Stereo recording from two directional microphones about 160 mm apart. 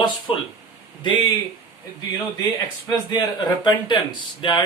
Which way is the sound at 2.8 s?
25° left (ahead or behind).